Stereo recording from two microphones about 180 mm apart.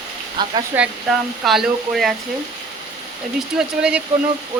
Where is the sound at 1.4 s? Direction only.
Centre (ahead or behind).